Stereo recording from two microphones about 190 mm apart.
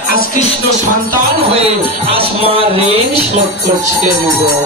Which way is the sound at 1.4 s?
30° right (ahead or behind).